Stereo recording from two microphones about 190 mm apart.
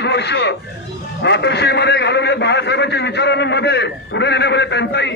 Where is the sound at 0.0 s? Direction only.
65° left (ahead or behind).